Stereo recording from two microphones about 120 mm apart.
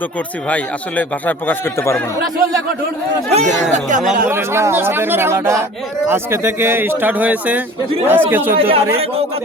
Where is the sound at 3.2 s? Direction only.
75° right (ahead or behind).